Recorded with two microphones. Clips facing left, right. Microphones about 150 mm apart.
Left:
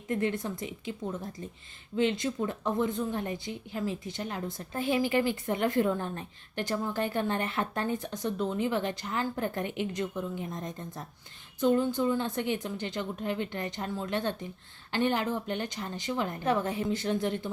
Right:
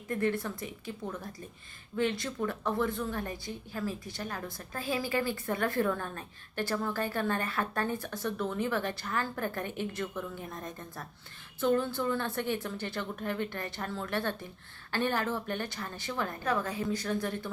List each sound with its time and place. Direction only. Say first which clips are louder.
0.1 s a woman's voice: left 1 dB; 20° left (ahead or behind)